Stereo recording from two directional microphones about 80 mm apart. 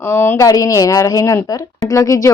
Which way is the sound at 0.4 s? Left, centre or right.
Left.